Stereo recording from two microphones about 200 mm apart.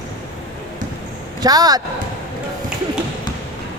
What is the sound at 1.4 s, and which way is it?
Speech, 20° right (ahead or behind).